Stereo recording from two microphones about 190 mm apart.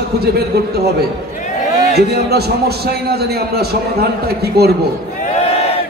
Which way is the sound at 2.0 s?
60° right (ahead or behind).